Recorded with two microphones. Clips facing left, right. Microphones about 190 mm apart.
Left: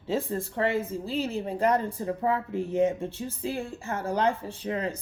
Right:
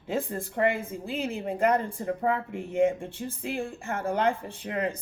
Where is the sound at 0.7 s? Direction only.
55° right (ahead or behind).